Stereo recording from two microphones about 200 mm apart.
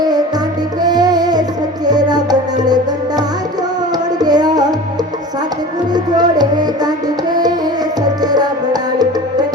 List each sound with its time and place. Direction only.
0.0 s music: 20° right (ahead or behind)
4.2 s music: 20° right (ahead or behind)
5.9 s music: 20° right (ahead or behind)
8.0 s music: 20° right (ahead or behind)